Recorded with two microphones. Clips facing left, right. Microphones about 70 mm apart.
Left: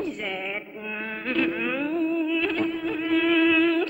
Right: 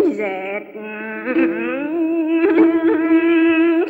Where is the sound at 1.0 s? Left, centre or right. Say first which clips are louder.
Right 9 dB; right.